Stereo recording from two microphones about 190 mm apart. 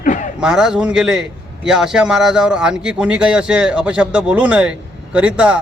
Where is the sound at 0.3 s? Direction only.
5° right (ahead or behind).